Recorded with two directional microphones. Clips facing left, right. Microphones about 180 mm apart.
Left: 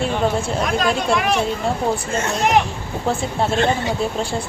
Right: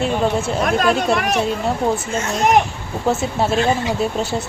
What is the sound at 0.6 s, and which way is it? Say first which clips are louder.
Speech: right 4 dB; 50° right (ahead or behind).